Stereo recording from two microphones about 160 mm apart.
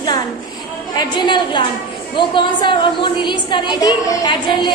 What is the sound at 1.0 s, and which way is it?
A woman's voice, 30° left (ahead or behind).